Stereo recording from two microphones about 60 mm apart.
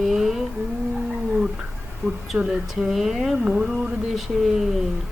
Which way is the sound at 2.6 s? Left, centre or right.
Centre.